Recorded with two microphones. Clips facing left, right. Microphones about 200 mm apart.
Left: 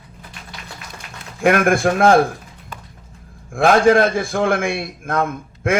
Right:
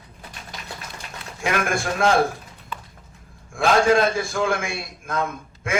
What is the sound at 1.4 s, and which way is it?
Speech, 55° left (ahead or behind).